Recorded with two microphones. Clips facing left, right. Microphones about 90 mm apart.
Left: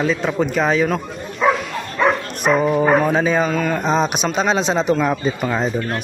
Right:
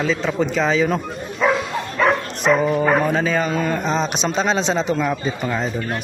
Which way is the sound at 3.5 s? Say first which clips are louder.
Left 1 dB; 5° right (ahead or behind).